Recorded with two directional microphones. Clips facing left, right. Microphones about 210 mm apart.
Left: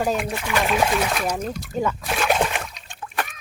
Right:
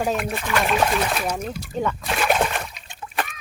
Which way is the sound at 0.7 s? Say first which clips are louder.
Left 1 dB; 5° left (ahead or behind).